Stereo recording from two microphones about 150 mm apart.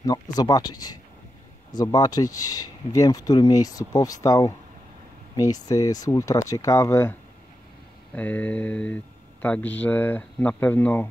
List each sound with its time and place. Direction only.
0.0 s speech: 25° left (ahead or behind)